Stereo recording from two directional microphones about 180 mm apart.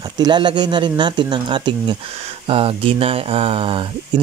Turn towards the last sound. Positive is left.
turn(degrees=-30)  # may be behind; listen again after turning